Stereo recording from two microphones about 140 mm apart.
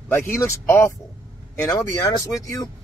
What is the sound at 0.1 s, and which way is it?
Speech, 15° left (ahead or behind).